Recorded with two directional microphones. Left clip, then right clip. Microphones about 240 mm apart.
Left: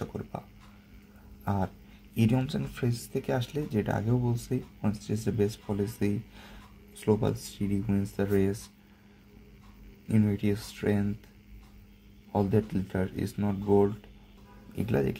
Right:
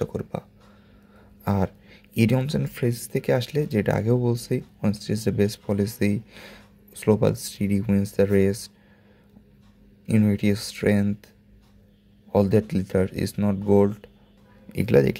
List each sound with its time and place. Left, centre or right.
0.0 s speech: right
1.4 s speech: right
10.0 s speech: right
12.3 s speech: right